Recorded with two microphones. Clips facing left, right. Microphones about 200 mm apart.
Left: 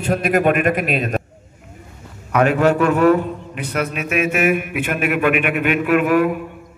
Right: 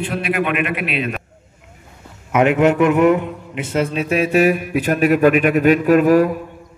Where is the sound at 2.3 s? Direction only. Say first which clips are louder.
Right 1 dB; 20° right (ahead or behind).